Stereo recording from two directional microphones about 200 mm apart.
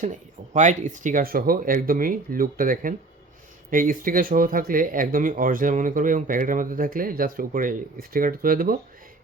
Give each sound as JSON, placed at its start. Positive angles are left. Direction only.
{"t": 0.0, "sound": "speech", "side_deg": -40}